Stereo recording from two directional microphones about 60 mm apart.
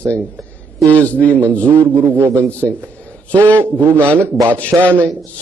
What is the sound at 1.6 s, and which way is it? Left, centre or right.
Speech, right.